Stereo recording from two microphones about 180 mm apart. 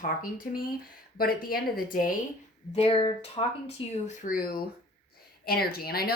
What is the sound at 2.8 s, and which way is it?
Speech, 30° left (ahead or behind).